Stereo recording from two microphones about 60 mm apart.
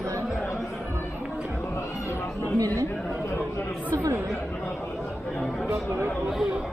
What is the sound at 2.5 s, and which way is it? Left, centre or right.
Speech, right.